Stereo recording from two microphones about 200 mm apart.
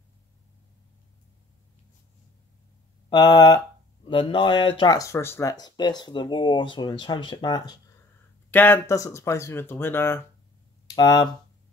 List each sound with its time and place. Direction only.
3.1 s speech: 20° left (ahead or behind)
8.5 s speech: 10° left (ahead or behind)